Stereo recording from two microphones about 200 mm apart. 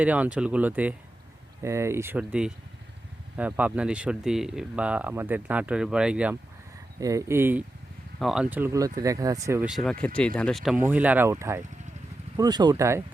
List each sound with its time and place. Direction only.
0.0 s speech: 5° right (ahead or behind)
7.0 s speech: 15° right (ahead or behind)